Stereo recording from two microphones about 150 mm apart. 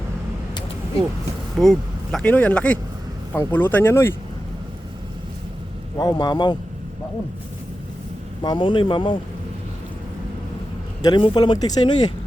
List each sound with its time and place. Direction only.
1.6 s speech: 5° left (ahead or behind)
6.0 s speech: 25° left (ahead or behind)
8.4 s speech: 30° left (ahead or behind)
11.0 s speech: 30° left (ahead or behind)